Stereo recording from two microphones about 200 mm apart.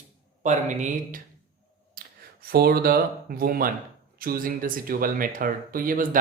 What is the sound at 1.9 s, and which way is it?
Speech, 50° right (ahead or behind).